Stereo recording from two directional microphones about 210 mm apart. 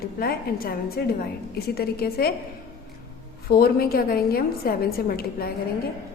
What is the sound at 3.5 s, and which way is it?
A woman's voice, 45° left (ahead or behind).